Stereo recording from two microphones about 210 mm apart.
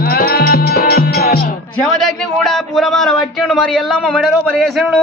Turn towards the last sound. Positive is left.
turn(degrees=0)  # may be behind; listen again after turning